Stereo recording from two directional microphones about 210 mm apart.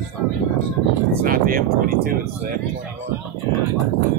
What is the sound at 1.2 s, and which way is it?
Speech, 45° right (ahead or behind).